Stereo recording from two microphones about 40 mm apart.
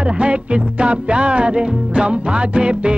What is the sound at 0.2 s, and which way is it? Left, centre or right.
Music, right.